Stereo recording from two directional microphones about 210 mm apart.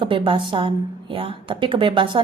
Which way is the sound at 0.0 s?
25° right (ahead or behind).